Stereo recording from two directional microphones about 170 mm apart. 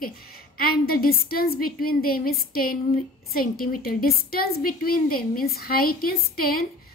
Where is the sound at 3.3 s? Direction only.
60° left (ahead or behind).